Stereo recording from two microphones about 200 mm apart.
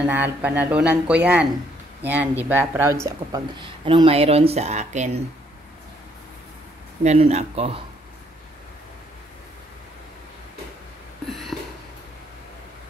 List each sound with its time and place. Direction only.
0.0 s speech: 10° right (ahead or behind); by 5.1 s 35° right (ahead or behind)
7.0 s speech: 35° right (ahead or behind)
11.2 s a sound: centre (ahead or behind)